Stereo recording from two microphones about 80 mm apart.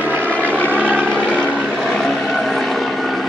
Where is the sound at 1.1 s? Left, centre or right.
Centre.